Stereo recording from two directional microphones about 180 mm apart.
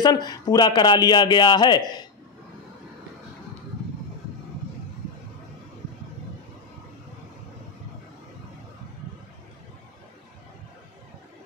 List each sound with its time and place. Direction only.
0.0 s speech: 20° left (ahead or behind)